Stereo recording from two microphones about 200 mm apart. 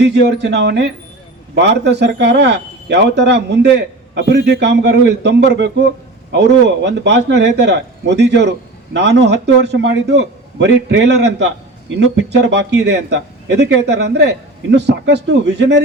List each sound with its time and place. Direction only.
0.0 s a man's voice: 60° right (ahead or behind)